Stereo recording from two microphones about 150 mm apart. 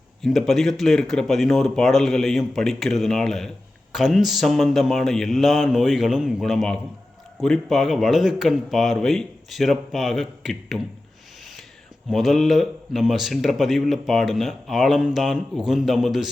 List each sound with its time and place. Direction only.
0.2 s speech: centre (ahead or behind)
12.1 s speech: centre (ahead or behind)